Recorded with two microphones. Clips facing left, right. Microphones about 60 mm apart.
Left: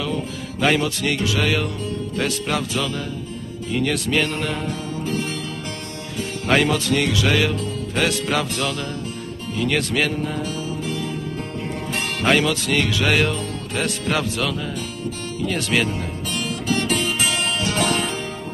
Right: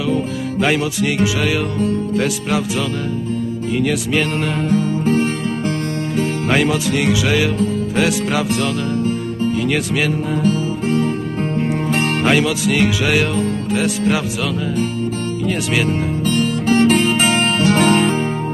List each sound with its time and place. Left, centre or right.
0.1 s music: centre
3.7 s music: centre
4.6 s music: right
6.5 s music: centre
9.7 s music: centre
10.4 s music: right
12.3 s music: centre
15.4 s music: centre
16.3 s music: right